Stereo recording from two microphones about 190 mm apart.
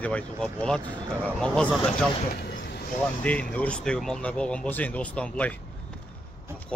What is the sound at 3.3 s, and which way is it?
Speech, 5° left (ahead or behind).